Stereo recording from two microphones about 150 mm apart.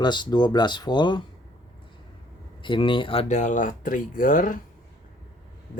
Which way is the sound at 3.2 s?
55° left (ahead or behind).